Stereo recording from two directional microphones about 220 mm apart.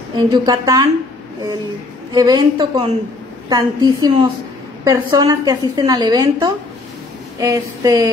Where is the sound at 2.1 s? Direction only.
20° right (ahead or behind).